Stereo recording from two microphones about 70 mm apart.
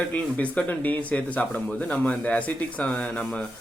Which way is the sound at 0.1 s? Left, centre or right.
Left.